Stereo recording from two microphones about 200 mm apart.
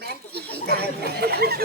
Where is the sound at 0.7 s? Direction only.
50° right (ahead or behind).